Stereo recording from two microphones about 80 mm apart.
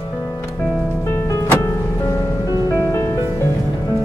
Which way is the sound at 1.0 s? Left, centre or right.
Left.